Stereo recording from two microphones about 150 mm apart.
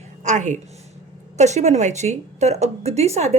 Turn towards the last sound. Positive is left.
turn(degrees=-45)  # may be behind; listen again after turning